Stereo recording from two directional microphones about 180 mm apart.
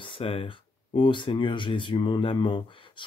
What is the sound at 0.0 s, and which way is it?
Speech, 30° left (ahead or behind).